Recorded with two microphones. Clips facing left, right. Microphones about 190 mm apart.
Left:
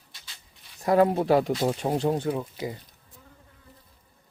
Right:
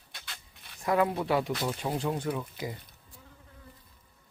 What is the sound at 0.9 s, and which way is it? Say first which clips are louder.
Speech: left 6 dB; 40° left (ahead or behind).